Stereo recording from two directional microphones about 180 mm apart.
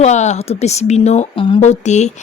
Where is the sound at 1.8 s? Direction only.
40° left (ahead or behind).